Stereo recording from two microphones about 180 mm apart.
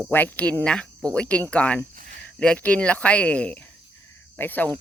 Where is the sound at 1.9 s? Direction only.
45° right (ahead or behind).